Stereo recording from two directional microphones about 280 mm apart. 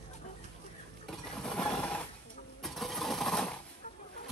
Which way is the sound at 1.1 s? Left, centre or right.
Centre.